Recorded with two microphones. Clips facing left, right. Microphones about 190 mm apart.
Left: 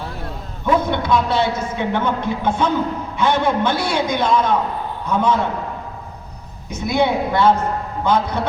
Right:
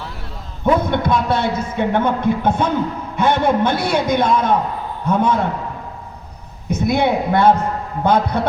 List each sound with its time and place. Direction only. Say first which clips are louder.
0.6 s a man's voice: right 2 dB; 55° right (ahead or behind)
6.7 s a man's voice: right 2 dB; 55° right (ahead or behind)